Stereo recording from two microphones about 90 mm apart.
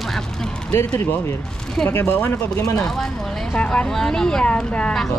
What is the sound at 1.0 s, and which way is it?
Speech, 25° left (ahead or behind).